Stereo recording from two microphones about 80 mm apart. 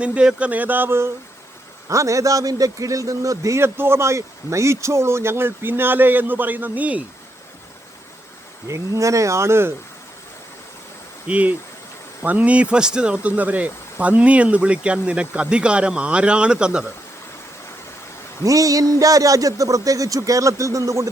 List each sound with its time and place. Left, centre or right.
0.0 s speech: centre; by 1.1 s right
1.9 s a man's voice: right; by 7.0 s centre
8.6 s a man's voice: right
11.3 s speech: centre
18.4 s speech: right